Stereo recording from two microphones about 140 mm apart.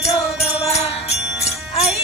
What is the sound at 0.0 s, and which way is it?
Music, 45° left (ahead or behind).